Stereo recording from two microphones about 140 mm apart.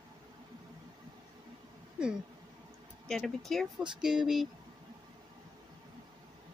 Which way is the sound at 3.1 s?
5° left (ahead or behind).